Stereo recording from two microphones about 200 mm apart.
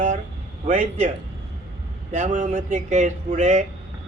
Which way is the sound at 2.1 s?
40° right (ahead or behind).